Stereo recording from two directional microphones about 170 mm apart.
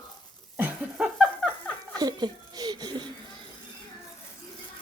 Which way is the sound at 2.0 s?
25° right (ahead or behind).